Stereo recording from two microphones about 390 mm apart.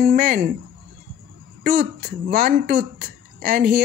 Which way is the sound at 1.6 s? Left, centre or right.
Right.